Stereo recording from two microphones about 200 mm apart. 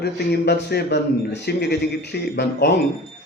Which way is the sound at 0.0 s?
55° left (ahead or behind).